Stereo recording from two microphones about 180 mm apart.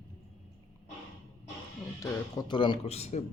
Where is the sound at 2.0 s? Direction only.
25° left (ahead or behind).